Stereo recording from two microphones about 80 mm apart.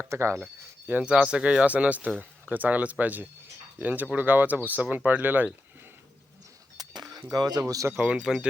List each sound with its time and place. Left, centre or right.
0.0 s speech: right
0.9 s speech: centre
6.7 s a sound: right
7.3 s speech: right
7.6 s speech: right
7.9 s speech: centre